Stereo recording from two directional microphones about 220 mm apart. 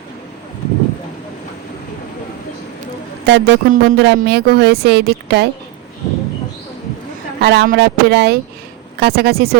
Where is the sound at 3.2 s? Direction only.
50° right (ahead or behind).